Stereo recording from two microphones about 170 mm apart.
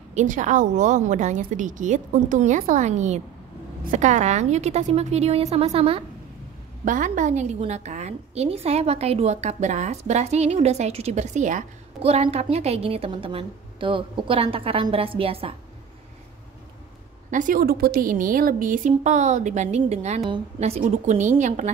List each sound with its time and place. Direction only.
0.1 s a woman's voice: 45° right (ahead or behind)
6.8 s a woman's voice: 50° right (ahead or behind); by 15.5 s 35° right (ahead or behind)
17.3 s a woman's voice: 50° right (ahead or behind)